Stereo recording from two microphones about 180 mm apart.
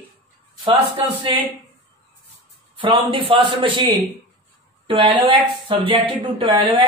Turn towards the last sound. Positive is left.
turn(degrees=-25)  # may be behind; listen again after turning